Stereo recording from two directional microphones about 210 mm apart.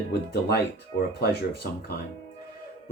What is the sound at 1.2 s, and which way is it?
Speech, 50° left (ahead or behind).